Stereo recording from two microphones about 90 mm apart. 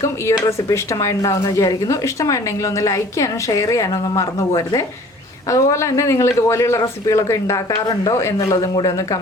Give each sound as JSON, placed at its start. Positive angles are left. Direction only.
{"t": 0.0, "sound": "speech", "side_deg": 35}